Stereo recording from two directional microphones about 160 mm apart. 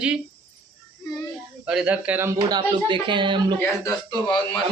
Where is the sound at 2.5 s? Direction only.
30° right (ahead or behind).